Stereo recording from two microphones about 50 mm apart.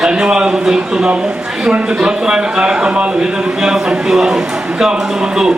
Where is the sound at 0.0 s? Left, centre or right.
Centre.